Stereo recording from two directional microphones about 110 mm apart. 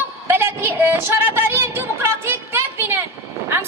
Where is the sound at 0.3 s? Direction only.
20° right (ahead or behind).